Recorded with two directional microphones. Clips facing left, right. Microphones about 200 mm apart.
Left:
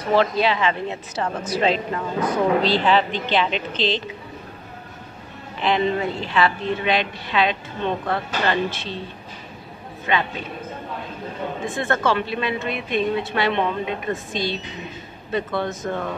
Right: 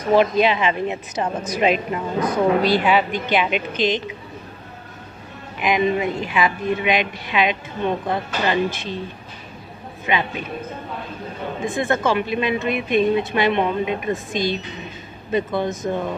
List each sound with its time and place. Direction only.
0.1 s speech: 15° right (ahead or behind)
5.6 s speech: 10° right (ahead or behind)
10.0 s speech: 15° right (ahead or behind)
11.6 s speech: 15° right (ahead or behind)